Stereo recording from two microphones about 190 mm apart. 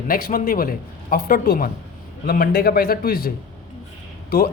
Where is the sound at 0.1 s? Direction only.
50° left (ahead or behind).